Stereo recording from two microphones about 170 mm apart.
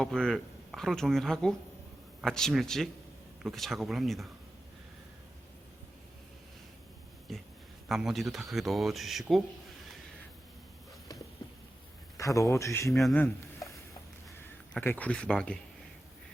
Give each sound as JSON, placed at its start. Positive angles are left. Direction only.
{"t": 0.0, "sound": "speech", "side_deg": 5}
{"t": 7.3, "sound": "speech", "side_deg": 0}
{"t": 12.1, "sound": "speech", "side_deg": 20}
{"t": 12.9, "sound": "speech", "side_deg": 0}
{"t": 14.7, "sound": "speech", "side_deg": 10}